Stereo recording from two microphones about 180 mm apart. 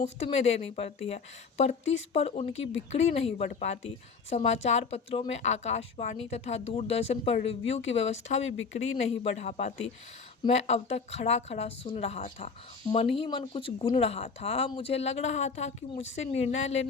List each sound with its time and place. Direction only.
0.0 s a woman's voice: 35° left (ahead or behind)